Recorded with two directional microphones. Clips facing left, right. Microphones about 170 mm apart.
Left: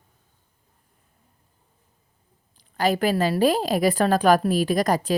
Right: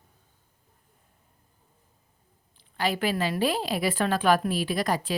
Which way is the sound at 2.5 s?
40° left (ahead or behind).